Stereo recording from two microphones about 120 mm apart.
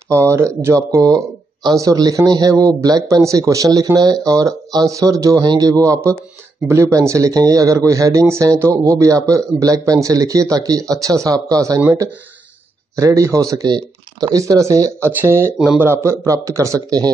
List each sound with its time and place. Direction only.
0.1 s a man's voice: 25° right (ahead or behind)
12.9 s a man's voice: 25° right (ahead or behind)